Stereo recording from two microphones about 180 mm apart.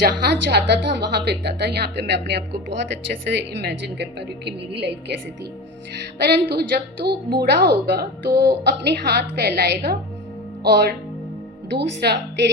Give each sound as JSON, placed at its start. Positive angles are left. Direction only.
{"t": 0.3, "sound": "a woman's voice", "side_deg": -70}
{"t": 6.1, "sound": "a woman's voice", "side_deg": -65}